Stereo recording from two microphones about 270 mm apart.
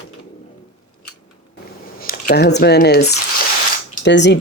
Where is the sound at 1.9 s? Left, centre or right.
Left.